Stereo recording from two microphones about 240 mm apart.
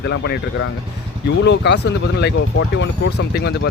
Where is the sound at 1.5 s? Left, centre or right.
Left.